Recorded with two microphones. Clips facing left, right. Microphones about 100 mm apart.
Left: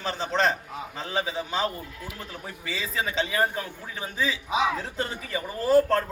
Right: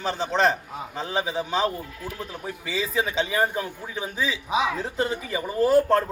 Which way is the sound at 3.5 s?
15° right (ahead or behind).